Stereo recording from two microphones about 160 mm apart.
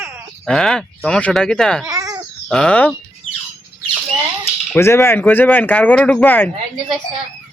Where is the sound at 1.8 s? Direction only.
20° right (ahead or behind).